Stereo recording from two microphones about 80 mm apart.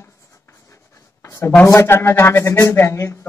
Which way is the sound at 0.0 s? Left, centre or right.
Left.